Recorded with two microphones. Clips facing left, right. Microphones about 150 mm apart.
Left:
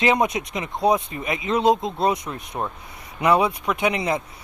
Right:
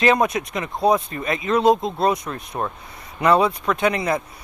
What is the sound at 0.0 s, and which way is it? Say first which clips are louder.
Speech: right 2 dB; 20° left (ahead or behind).